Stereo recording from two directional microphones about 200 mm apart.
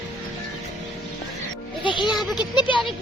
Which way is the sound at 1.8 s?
25° left (ahead or behind).